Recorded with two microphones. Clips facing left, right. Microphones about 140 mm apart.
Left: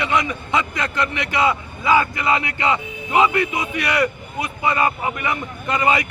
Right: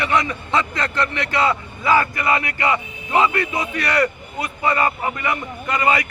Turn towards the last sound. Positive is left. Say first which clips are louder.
# even
turn(degrees=20)  # may be behind; listen again after turning